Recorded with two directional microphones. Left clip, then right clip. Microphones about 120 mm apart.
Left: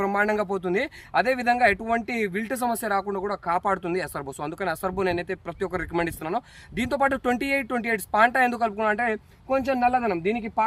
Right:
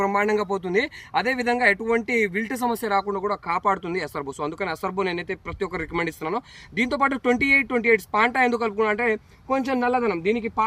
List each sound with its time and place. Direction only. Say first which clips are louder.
0.0 s speech: right 2 dB; 30° left (ahead or behind)
2.8 s speech: right 3 dB; 45° left (ahead or behind)